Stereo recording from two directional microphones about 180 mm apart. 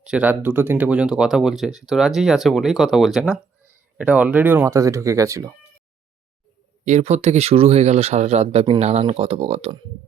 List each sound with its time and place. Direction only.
0.0 s speech: 5° right (ahead or behind)
6.8 s speech: 40° right (ahead or behind)